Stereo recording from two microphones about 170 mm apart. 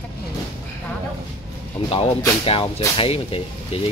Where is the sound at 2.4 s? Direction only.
35° left (ahead or behind).